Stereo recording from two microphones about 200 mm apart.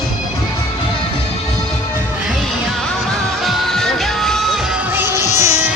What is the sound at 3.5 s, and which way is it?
Music, centre (ahead or behind).